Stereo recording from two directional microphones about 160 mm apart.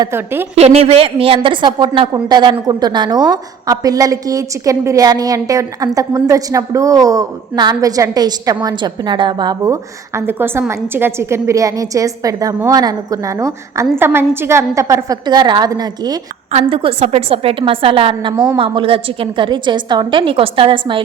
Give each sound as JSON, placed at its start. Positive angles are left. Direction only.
{"t": 0.0, "sound": "a woman's voice", "side_deg": -15}
{"t": 0.5, "sound": "a woman's voice", "side_deg": -40}
{"t": 16.5, "sound": "a woman's voice", "side_deg": -40}